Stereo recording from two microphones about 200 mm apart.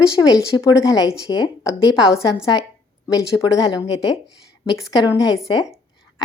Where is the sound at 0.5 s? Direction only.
15° left (ahead or behind).